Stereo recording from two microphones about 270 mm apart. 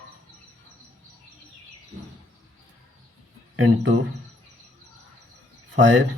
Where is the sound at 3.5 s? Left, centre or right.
Right.